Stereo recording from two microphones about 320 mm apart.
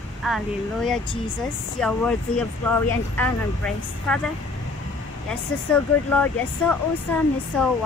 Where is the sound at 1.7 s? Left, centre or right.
Centre.